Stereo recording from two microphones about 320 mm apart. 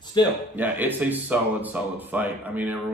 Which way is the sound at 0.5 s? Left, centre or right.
Centre.